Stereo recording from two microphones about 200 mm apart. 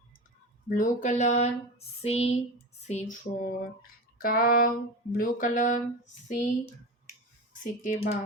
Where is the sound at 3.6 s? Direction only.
45° left (ahead or behind).